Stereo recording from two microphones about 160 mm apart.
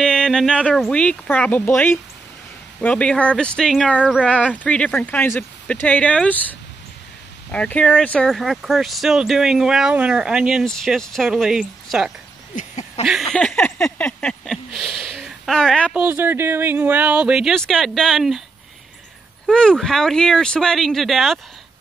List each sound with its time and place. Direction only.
0.0 s speech: 5° left (ahead or behind)
7.5 s speech: 10° left (ahead or behind)
12.5 s a sound: 45° left (ahead or behind)
13.0 s a sound: centre (ahead or behind)
15.9 s speech: 10° right (ahead or behind)
19.4 s speech: 5° left (ahead or behind)